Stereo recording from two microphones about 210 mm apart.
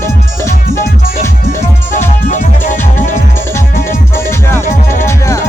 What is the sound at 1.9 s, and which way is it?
Music, 35° left (ahead or behind).